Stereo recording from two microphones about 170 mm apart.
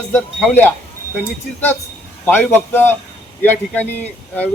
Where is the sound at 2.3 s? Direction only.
10° left (ahead or behind).